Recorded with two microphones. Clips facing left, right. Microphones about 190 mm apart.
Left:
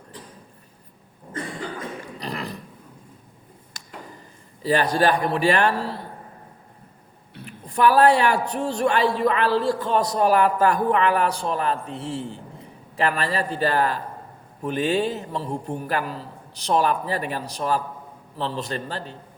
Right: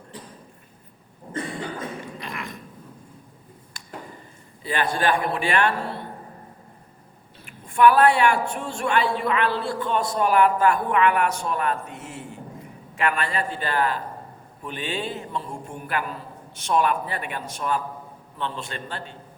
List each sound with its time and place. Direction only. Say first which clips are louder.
2.1 s a sound: left 4 dB; 35° left (ahead or behind)
4.6 s a man's voice: left 4 dB; 40° left (ahead or behind)
7.4 s a man's voice: right 2 dB; 35° left (ahead or behind)